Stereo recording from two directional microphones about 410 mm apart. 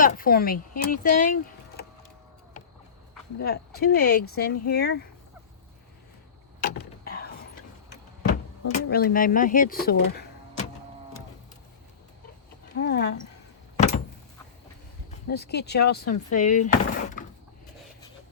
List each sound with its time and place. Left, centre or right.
0.0 s speech: left
3.4 s speech: left
6.6 s vehicle: left
8.7 s speech: left
12.7 s speech: left
15.3 s speech: left